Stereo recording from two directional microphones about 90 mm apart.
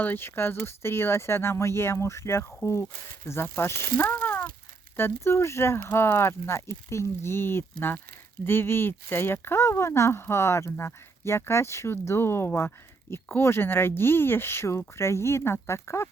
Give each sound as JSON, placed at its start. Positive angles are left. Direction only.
{"t": 0.0, "sound": "speech", "side_deg": 25}